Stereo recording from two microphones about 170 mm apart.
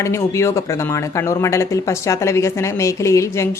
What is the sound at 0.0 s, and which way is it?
A woman's voice, 15° left (ahead or behind).